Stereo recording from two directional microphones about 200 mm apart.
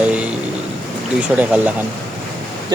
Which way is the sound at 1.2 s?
5° right (ahead or behind).